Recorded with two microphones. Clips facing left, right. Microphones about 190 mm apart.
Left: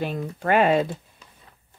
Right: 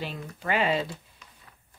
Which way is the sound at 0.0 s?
50° left (ahead or behind).